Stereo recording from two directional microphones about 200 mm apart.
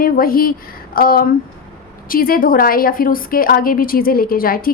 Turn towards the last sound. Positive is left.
turn(degrees=45)  # may be behind; listen again after turning